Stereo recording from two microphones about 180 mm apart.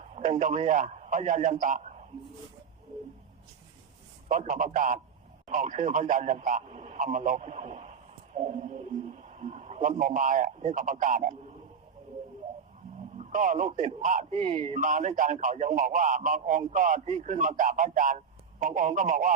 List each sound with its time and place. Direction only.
0.0 s a man's voice: 40° right (ahead or behind)
4.3 s a man's voice: 45° right (ahead or behind)
13.1 s a man's voice: 45° right (ahead or behind)